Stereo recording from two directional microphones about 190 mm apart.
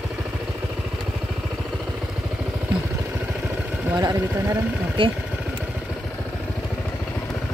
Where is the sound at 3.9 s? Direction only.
15° right (ahead or behind).